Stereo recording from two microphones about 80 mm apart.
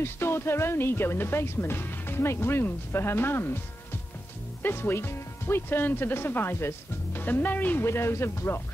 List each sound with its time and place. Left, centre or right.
0.0 s speech: left
4.6 s speech: left
7.8 s speech: left